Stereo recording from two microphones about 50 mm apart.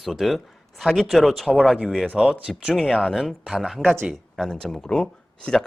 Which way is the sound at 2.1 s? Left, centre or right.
Centre.